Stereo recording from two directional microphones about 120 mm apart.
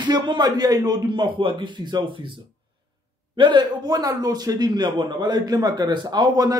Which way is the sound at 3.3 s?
40° right (ahead or behind).